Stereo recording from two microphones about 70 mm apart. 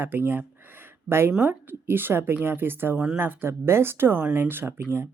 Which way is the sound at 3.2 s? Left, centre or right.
Right.